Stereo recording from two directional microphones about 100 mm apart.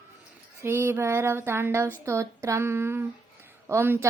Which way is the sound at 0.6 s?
25° right (ahead or behind).